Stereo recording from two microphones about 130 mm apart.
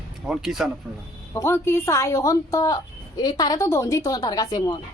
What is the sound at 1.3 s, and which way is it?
A woman's voice, 20° left (ahead or behind).